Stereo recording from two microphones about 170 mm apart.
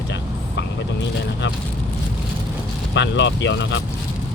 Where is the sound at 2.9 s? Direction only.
90° left.